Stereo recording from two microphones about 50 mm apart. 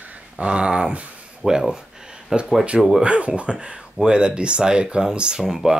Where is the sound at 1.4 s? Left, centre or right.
Centre.